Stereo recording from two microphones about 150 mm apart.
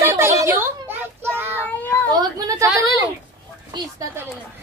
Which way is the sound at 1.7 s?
10° left (ahead or behind).